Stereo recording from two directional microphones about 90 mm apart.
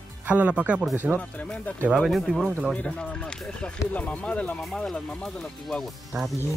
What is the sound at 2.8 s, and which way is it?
Speech, 15° left (ahead or behind).